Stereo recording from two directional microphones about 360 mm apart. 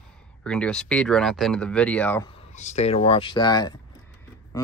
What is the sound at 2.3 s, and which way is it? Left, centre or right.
Speech, centre.